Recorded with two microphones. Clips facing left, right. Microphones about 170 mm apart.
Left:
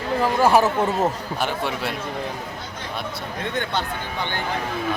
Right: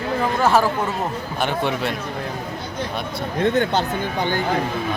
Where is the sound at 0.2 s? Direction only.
10° left (ahead or behind).